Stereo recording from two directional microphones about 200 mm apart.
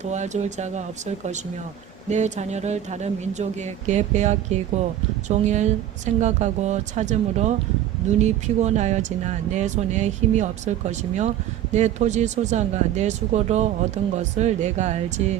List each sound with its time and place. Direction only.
0.0 s speech: 35° right (ahead or behind)